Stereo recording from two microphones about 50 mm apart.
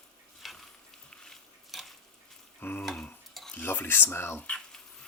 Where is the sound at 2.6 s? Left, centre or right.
Left.